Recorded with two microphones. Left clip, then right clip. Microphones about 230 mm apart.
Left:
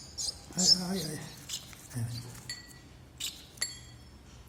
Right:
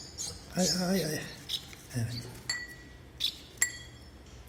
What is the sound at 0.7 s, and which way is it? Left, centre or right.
Speech, centre.